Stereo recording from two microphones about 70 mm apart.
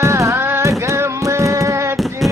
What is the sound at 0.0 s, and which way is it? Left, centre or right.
Music, right.